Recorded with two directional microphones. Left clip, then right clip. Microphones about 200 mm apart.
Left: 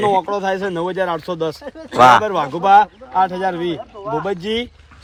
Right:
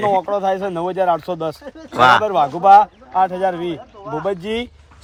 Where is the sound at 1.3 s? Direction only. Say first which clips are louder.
Left 1 dB; 55° right (ahead or behind).